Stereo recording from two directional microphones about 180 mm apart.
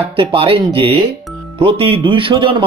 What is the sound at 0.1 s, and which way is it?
Speech, 30° right (ahead or behind).